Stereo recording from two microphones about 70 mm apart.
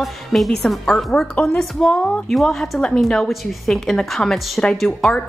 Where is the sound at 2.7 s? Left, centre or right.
Centre.